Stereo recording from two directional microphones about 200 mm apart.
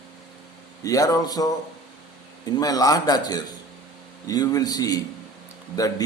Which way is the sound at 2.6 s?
20° left (ahead or behind).